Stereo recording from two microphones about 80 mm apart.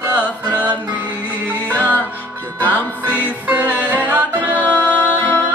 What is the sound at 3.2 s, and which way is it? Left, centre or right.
Music, right.